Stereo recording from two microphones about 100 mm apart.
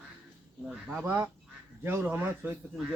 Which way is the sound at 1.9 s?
20° right (ahead or behind).